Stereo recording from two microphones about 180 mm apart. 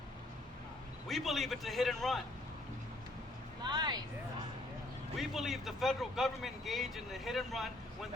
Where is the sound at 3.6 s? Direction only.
25° right (ahead or behind).